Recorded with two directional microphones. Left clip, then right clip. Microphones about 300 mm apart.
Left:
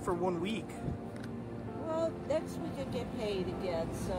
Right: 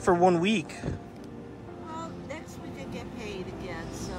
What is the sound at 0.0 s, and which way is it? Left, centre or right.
Speech, right.